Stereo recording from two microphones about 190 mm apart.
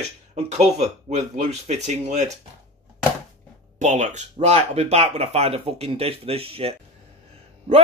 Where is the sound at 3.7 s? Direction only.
40° right (ahead or behind).